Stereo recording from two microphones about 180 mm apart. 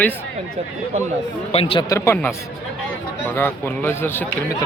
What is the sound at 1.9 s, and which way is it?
Speech, 15° left (ahead or behind).